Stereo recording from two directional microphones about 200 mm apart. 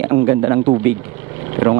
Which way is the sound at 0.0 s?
15° right (ahead or behind).